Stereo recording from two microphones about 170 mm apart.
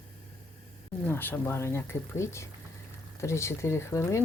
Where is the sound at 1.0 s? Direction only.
10° left (ahead or behind).